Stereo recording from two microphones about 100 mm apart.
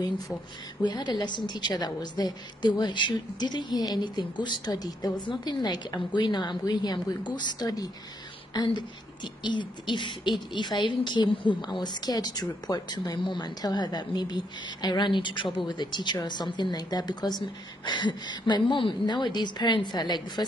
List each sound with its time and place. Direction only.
0.8 s a woman's voice: 45° left (ahead or behind)
8.5 s a woman's voice: 50° left (ahead or behind)